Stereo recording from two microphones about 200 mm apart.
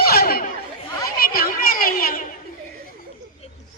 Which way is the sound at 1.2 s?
45° left (ahead or behind).